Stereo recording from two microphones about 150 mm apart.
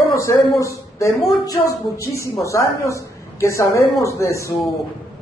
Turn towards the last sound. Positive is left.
turn(degrees=20)  # may be behind; listen again after turning